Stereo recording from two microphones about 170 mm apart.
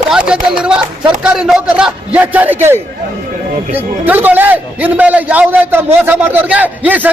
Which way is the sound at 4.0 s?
10° right (ahead or behind).